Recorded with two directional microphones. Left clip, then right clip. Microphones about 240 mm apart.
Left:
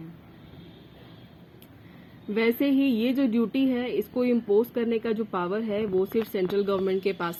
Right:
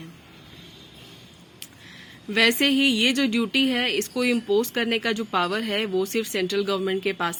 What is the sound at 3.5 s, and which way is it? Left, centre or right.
Speech, right.